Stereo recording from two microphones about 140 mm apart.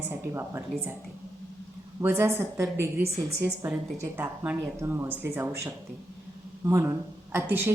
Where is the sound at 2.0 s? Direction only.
20° right (ahead or behind).